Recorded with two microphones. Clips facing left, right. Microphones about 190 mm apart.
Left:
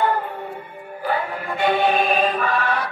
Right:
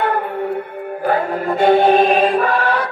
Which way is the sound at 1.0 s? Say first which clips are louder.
Right 7 dB; 45° right (ahead or behind).